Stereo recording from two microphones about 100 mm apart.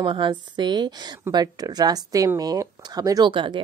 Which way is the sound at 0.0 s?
50° right (ahead or behind).